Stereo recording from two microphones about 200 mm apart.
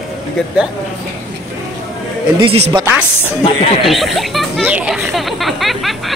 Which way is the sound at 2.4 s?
25° right (ahead or behind).